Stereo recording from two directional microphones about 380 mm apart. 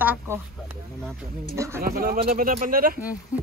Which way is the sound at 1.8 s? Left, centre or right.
Right.